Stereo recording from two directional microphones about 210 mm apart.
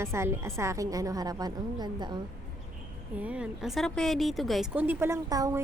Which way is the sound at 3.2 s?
5° right (ahead or behind).